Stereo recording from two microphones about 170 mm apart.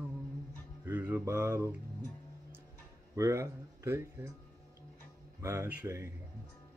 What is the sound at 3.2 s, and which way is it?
Speech, 15° right (ahead or behind).